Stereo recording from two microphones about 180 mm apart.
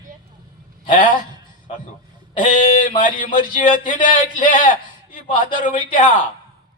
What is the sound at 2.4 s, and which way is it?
A man's voice, 45° left (ahead or behind).